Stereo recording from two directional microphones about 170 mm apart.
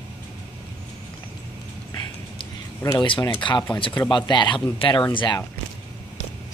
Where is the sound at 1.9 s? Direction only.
20° left (ahead or behind).